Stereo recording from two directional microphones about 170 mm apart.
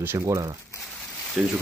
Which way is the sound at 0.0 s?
20° right (ahead or behind).